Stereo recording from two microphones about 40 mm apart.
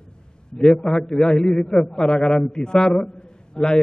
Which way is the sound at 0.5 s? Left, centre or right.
Centre.